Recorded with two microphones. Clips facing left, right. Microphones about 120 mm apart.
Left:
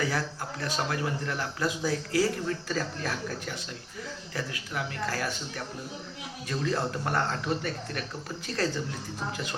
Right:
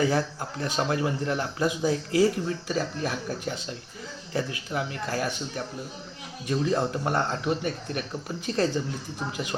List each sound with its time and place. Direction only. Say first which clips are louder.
0.0 s speech: right 5 dB; 25° right (ahead or behind)